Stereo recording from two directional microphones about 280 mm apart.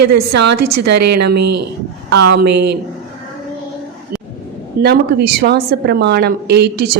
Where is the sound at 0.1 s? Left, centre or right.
Right.